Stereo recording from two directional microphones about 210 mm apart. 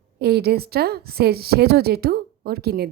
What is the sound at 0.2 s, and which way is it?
A woman's voice, 50° right (ahead or behind).